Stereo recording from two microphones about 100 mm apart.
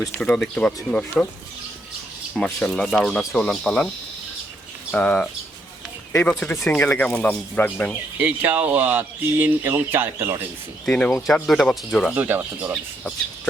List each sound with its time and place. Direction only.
0.0 s speech: 10° left (ahead or behind)
2.3 s speech: 10° left (ahead or behind)
4.9 s speech: 10° left (ahead or behind)
8.2 s speech: 20° right (ahead or behind)
10.8 s speech: 10° left (ahead or behind)
11.4 s speech: centre (ahead or behind)
12.1 s speech: 20° right (ahead or behind)